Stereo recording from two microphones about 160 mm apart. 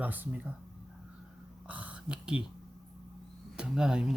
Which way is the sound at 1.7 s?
10° right (ahead or behind).